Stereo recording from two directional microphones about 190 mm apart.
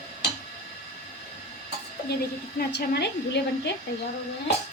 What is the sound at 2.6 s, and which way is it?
Speech, 60° left (ahead or behind).